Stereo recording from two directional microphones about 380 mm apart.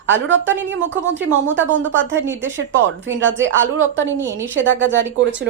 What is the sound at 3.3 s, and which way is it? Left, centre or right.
Speech, centre.